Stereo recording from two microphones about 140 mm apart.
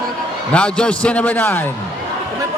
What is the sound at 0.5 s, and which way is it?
A man's voice, 10° left (ahead or behind).